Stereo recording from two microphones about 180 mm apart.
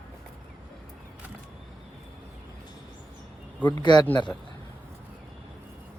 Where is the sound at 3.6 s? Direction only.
25° left (ahead or behind).